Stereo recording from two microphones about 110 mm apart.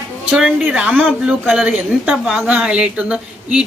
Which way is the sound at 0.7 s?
10° right (ahead or behind).